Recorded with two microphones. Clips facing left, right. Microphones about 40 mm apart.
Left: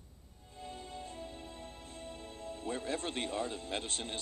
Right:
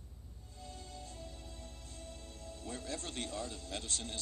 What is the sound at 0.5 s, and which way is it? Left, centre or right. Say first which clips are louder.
Music: left 5 dB; left.